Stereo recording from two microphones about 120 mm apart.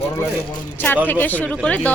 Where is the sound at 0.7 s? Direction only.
15° left (ahead or behind).